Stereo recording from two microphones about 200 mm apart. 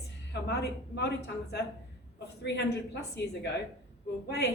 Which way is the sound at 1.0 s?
55° left (ahead or behind).